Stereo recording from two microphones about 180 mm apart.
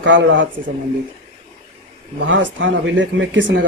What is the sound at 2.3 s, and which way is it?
Speech, 90° right.